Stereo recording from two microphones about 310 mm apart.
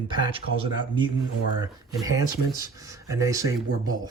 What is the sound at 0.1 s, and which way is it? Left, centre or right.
Speech, centre.